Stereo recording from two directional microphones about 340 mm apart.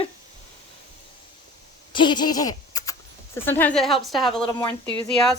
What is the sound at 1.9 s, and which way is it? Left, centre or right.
Speech, centre.